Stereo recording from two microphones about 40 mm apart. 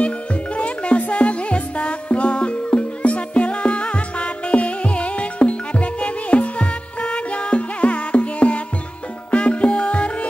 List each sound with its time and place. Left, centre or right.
0.6 s music: left